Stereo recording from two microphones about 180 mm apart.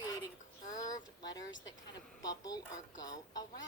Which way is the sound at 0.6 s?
45° left (ahead or behind).